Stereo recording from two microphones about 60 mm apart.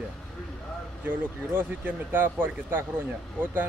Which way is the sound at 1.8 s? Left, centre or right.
Right.